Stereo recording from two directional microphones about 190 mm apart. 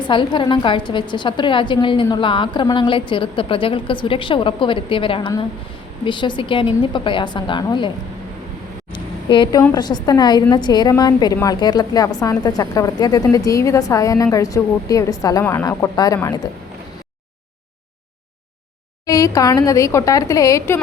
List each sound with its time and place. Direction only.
0.1 s a woman's voice: 25° left (ahead or behind)
8.9 s a sound: 25° left (ahead or behind)
9.7 s a woman's voice: 20° left (ahead or behind)
19.0 s speech: 20° left (ahead or behind)